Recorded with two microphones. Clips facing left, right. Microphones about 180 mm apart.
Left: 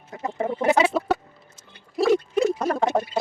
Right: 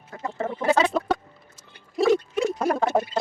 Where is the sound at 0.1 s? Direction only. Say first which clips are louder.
Left 3 dB; 15° left (ahead or behind).